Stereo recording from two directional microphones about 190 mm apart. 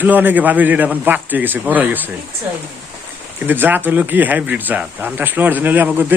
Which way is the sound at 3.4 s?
10° right (ahead or behind).